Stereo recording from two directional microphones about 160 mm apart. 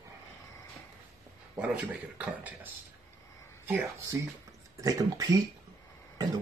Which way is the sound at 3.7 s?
15° right (ahead or behind).